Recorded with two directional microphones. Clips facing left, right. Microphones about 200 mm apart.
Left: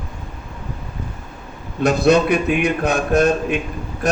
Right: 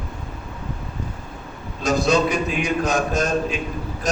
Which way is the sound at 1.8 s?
60° left (ahead or behind).